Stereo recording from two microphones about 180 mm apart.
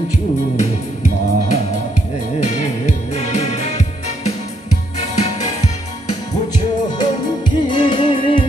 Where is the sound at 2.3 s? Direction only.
40° left (ahead or behind).